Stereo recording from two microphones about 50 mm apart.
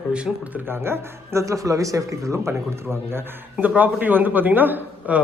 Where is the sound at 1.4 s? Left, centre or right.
Right.